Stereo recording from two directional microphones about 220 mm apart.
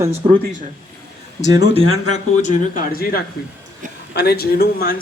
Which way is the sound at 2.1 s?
35° left (ahead or behind).